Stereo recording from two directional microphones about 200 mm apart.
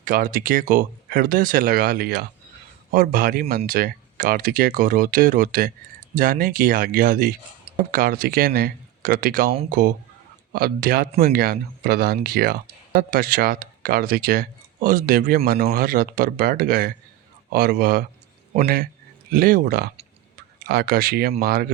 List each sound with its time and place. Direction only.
0.0 s speech: 45° right (ahead or behind)